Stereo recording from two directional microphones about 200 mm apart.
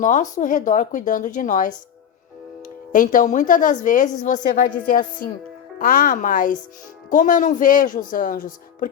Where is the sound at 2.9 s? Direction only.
40° left (ahead or behind).